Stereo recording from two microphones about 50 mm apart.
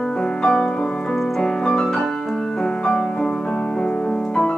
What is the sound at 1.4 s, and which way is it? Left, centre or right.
Piano, centre.